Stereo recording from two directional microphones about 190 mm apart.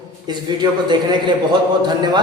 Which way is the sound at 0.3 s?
20° right (ahead or behind).